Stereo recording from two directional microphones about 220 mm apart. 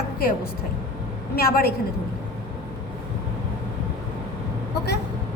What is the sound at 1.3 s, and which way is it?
Speech, 45° left (ahead or behind).